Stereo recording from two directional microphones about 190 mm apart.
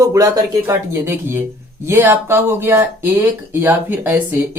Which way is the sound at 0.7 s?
15° right (ahead or behind).